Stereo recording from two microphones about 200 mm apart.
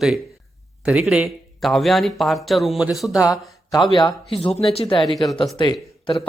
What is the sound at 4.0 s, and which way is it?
Speech, 20° left (ahead or behind).